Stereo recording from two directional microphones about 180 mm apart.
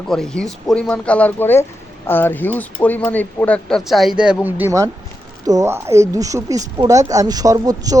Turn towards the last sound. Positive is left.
turn(degrees=-20)  # may be behind; listen again after turning